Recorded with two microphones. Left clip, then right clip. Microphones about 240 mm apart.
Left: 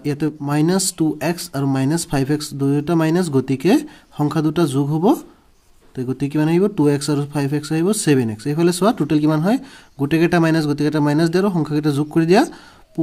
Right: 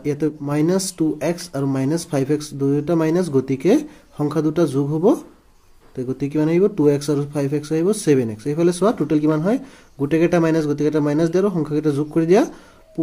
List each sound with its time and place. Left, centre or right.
0.7 s speech: left